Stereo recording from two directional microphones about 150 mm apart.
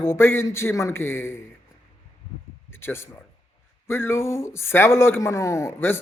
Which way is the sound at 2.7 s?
15° left (ahead or behind).